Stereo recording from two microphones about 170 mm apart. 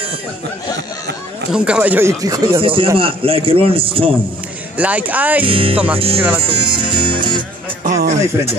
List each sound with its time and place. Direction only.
1.5 s a man's voice: 5° right (ahead or behind); by 4.1 s 30° right (ahead or behind)
4.7 s speech: 10° right (ahead or behind)
5.4 s a man's voice: 30° right (ahead or behind)
6.4 s music: 30° right (ahead or behind)
7.8 s a sound: 50° right (ahead or behind)